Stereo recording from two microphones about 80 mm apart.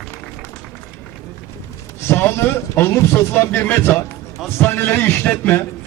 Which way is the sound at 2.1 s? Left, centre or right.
Left.